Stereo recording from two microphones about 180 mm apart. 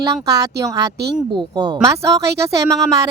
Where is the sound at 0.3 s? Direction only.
20° right (ahead or behind).